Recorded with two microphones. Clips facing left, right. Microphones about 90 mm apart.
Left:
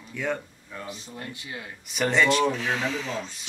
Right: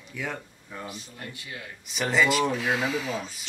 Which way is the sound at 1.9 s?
5° right (ahead or behind).